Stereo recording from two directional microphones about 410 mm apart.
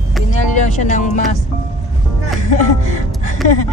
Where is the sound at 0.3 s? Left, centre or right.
Centre.